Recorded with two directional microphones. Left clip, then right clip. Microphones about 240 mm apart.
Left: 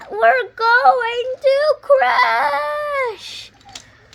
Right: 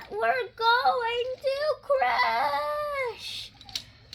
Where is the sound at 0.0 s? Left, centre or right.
Left.